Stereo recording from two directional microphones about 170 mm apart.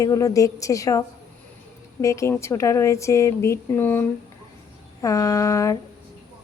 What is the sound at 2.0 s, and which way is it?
A woman's voice, 15° left (ahead or behind).